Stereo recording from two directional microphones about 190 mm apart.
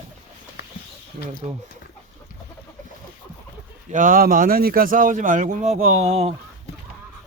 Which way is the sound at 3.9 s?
45° right (ahead or behind).